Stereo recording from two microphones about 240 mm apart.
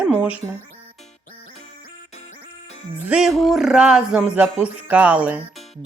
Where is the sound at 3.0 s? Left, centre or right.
Centre.